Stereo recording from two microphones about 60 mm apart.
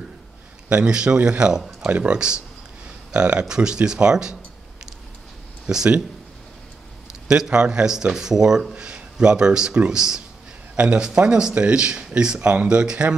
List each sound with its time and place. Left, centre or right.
0.7 s speech: centre
5.7 s speech: centre
7.2 s speech: centre